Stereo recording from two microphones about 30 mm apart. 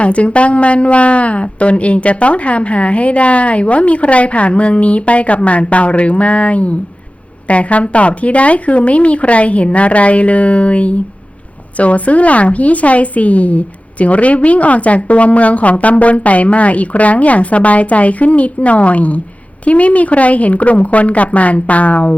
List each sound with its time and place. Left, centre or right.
0.0 s a woman's voice: left